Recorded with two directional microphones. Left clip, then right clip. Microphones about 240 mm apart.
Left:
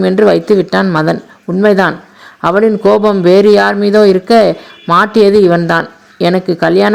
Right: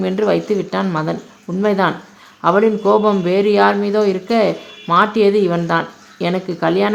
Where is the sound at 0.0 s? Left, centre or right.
Left.